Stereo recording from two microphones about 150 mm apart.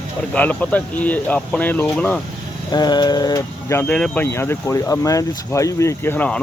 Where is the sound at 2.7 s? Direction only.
30° left (ahead or behind).